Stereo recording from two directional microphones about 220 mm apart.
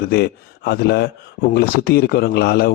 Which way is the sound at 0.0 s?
45° left (ahead or behind).